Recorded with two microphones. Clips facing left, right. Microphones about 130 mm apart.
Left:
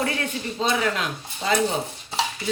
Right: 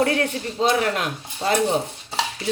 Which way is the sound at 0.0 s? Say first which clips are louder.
Right 5 dB; 55° right (ahead or behind).